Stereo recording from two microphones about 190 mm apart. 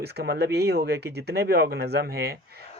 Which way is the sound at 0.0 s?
60° right (ahead or behind).